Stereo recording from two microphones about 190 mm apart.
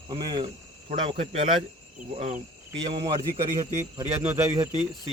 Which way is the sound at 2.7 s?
25° right (ahead or behind).